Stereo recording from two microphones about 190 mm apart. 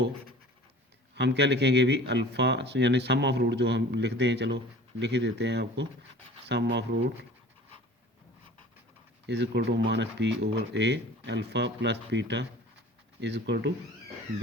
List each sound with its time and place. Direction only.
1.1 s speech: 65° right (ahead or behind)
6.1 s a sound: 30° right (ahead or behind)
6.5 s speech: 65° right (ahead or behind)
9.2 s speech: 65° right (ahead or behind)